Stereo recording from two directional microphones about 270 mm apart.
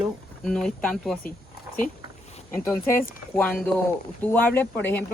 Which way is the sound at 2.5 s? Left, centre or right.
Centre.